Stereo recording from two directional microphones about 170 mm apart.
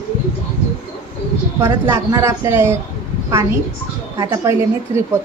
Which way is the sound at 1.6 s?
15° right (ahead or behind).